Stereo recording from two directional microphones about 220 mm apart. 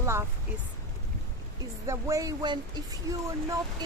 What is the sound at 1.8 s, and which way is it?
Speech, 15° right (ahead or behind).